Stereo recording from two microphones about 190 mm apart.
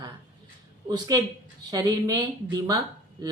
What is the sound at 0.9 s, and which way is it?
Speech, 20° right (ahead or behind).